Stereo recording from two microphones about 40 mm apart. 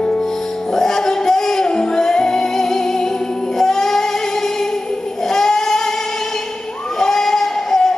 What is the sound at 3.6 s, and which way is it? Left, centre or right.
Child singing, centre.